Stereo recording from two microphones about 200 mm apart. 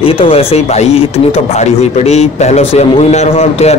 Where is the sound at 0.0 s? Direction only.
30° left (ahead or behind).